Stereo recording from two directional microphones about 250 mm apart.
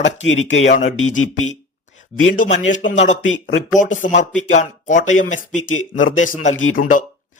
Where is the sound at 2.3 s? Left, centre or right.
Left.